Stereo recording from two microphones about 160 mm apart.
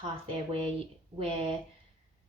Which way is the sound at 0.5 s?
35° right (ahead or behind).